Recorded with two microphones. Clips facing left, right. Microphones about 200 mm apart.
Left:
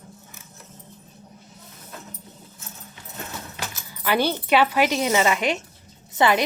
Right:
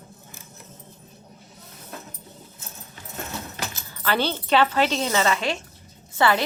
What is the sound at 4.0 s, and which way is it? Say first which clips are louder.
A woman's voice: left 2 dB; 15° left (ahead or behind).